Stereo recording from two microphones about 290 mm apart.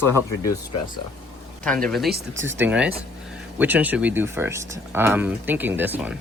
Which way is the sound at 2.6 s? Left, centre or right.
Centre.